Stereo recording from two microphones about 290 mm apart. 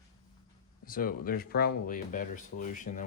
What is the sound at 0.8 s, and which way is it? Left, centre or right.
Speech, left.